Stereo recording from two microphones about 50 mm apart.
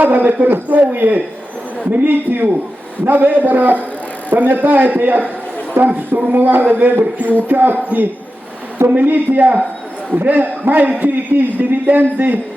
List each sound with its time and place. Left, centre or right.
0.0 s a man's voice: right